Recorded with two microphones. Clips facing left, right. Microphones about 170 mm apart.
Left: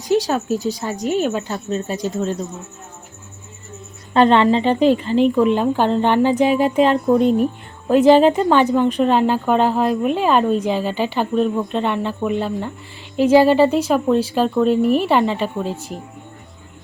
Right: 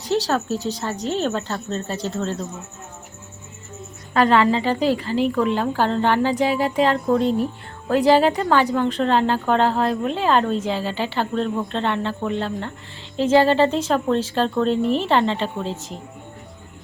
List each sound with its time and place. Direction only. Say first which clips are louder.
0.0 s a woman's voice: left 3 dB; 15° left (ahead or behind)
4.1 s a woman's voice: left 3 dB; 25° left (ahead or behind)